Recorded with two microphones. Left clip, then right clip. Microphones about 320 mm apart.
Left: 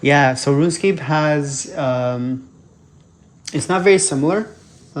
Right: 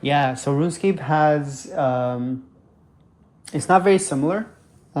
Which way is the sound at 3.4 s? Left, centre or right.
Centre.